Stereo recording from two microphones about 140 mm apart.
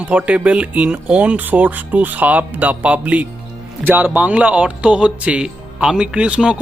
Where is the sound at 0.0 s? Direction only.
10° right (ahead or behind).